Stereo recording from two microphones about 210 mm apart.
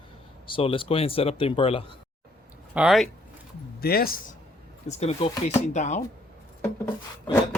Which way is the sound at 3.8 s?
45° left (ahead or behind).